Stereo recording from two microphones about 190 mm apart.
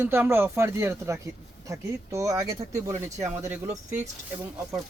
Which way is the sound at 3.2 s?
10° right (ahead or behind).